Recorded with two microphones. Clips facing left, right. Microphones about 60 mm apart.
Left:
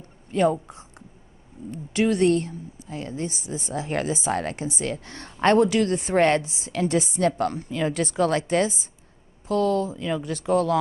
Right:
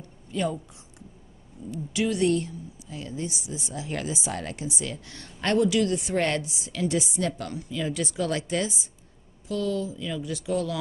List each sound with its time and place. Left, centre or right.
0.3 s a woman's voice: left